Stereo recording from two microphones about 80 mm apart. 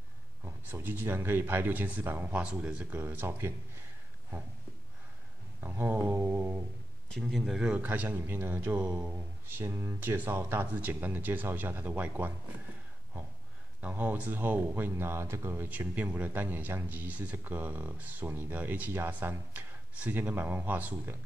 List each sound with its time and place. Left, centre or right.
0.7 s speech: right
5.6 s speech: right
7.2 s speech: centre
7.6 s speech: centre
9.5 s speech: right
13.7 s speech: right